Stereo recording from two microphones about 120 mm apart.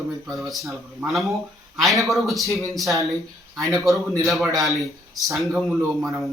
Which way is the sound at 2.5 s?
25° right (ahead or behind).